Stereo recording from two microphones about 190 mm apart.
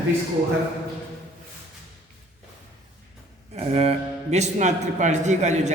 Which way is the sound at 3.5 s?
35° right (ahead or behind).